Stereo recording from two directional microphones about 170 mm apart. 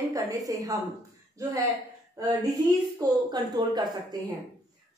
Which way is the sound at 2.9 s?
25° right (ahead or behind).